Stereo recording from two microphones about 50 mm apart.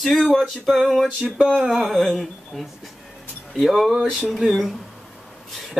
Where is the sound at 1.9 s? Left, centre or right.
Centre.